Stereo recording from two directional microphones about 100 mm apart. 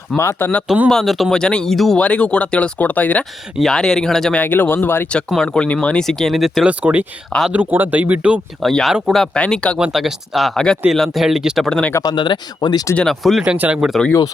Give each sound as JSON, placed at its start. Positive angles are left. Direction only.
{"t": 0.2, "sound": "speech", "side_deg": 20}
{"t": 0.9, "sound": "speech", "side_deg": 0}
{"t": 4.4, "sound": "speech", "side_deg": 20}
{"t": 6.7, "sound": "speech", "side_deg": -15}
{"t": 8.6, "sound": "speech", "side_deg": 0}
{"t": 9.3, "sound": "speech", "side_deg": 10}
{"t": 9.7, "sound": "speech", "side_deg": -5}
{"t": 12.0, "sound": "speech", "side_deg": 50}
{"t": 13.0, "sound": "speech", "side_deg": 0}
{"t": 13.4, "sound": "speech", "side_deg": -10}